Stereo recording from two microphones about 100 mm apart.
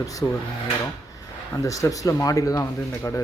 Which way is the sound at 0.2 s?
25° left (ahead or behind).